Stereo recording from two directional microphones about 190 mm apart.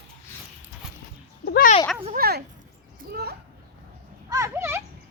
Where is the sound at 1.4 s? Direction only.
55° left (ahead or behind).